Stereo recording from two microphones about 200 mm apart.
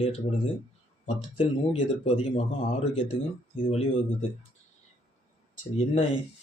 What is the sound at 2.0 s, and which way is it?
Speech, 30° left (ahead or behind).